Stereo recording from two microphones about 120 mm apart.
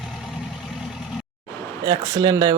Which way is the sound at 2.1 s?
30° right (ahead or behind).